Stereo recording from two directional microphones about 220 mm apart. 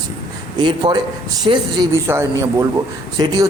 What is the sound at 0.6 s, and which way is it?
A man's voice, 20° right (ahead or behind).